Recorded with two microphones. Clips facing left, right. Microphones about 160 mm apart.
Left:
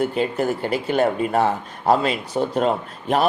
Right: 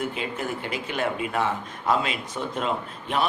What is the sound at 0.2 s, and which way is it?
A man's voice, 40° left (ahead or behind).